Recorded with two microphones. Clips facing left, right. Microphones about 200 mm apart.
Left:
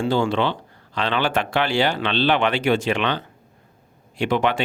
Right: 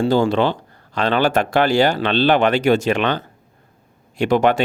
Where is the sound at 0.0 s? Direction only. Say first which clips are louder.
Right 4 dB; 40° right (ahead or behind).